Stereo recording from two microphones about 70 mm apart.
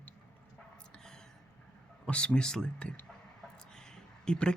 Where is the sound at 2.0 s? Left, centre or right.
Centre.